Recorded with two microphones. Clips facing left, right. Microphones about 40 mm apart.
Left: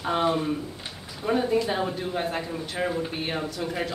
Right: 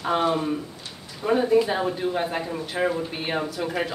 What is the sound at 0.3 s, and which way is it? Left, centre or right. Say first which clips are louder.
Speech: right 1 dB; centre.